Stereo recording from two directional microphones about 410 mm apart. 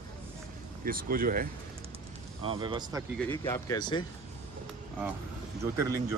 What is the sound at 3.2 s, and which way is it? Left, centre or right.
Speech, centre.